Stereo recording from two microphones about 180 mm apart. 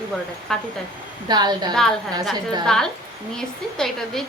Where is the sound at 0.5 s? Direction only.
Centre (ahead or behind).